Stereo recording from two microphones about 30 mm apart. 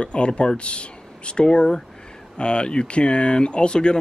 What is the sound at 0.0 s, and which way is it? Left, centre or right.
Speech, left.